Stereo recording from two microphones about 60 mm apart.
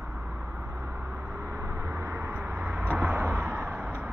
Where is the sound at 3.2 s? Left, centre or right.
Right.